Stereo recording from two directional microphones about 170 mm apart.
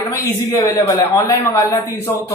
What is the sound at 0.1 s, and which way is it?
A man's voice, 20° left (ahead or behind).